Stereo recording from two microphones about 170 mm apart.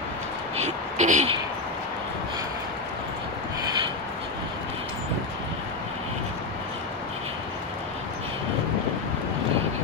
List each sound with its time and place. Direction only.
0.6 s speech: 45° right (ahead or behind)